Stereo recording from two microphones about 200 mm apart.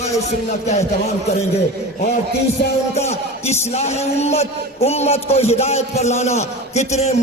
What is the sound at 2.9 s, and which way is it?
Music, 35° left (ahead or behind).